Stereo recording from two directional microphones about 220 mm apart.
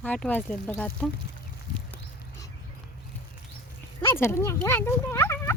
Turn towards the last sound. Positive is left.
turn(degrees=10)  # may be behind; listen again after turning